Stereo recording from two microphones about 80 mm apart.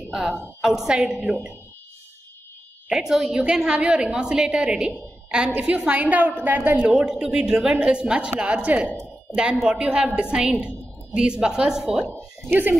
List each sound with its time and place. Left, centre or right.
0.1 s a woman's voice: centre
2.9 s a woman's voice: centre
6.8 s a woman's voice: centre
12.4 s speech: right